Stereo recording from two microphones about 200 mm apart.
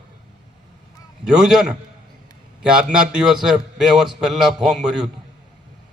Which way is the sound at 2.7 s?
5° right (ahead or behind).